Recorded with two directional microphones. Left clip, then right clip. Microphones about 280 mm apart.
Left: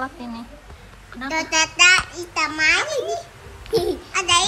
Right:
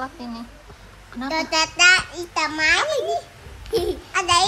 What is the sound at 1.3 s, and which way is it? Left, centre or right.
A child's voice, right.